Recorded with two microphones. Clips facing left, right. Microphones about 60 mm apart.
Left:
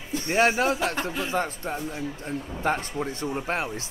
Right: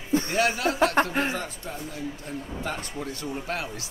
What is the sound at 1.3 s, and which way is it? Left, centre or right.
Speech, left.